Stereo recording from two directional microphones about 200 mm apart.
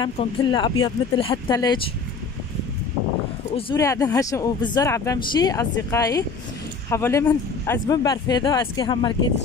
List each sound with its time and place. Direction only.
0.0 s speech: 25° left (ahead or behind)
3.5 s speech: 25° left (ahead or behind)
3.8 s speech: 15° left (ahead or behind)